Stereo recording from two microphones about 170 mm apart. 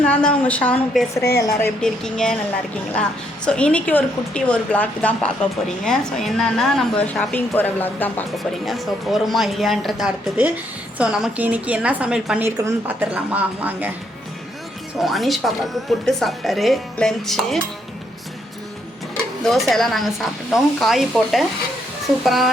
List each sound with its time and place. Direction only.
0.0 s a woman's voice: 5° left (ahead or behind)
1.8 s a woman's voice: 5° left (ahead or behind)
8.6 s a woman's voice: centre (ahead or behind)
14.9 s speech: centre (ahead or behind)
19.1 s speech: centre (ahead or behind)